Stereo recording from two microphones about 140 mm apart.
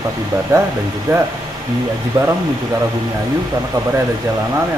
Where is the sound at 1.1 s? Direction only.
20° right (ahead or behind).